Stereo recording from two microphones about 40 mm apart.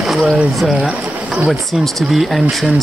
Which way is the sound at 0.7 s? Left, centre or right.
Right.